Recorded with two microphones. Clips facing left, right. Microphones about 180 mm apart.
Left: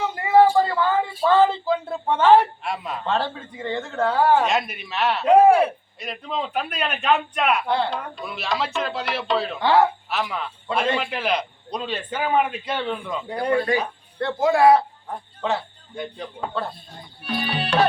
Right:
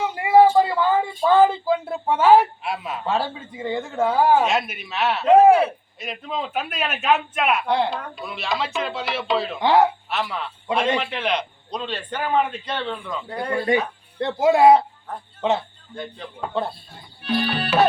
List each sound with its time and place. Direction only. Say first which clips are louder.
0.0 s a sound: right 1 dB; 10° right (ahead or behind)
1.2 s a man's voice: right 1 dB; 10° right (ahead or behind)
9.6 s speech: right 1 dB; 20° right (ahead or behind)
10.1 s a man's voice: even; centre (ahead or behind)
13.7 s speech: right 2 dB; 25° right (ahead or behind)
17.2 s music: right 3 dB; centre (ahead or behind)